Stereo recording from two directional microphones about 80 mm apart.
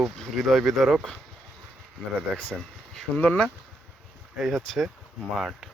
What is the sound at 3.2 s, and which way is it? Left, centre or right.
Speech, centre.